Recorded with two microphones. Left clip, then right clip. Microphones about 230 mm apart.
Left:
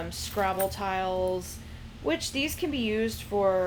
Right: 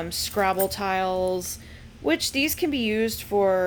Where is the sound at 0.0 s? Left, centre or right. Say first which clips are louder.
Right 5 dB; right.